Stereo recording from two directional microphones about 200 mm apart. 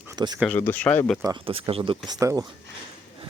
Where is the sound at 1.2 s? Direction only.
25° right (ahead or behind).